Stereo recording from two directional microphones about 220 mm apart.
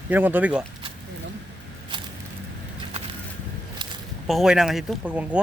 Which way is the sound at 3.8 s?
20° right (ahead or behind).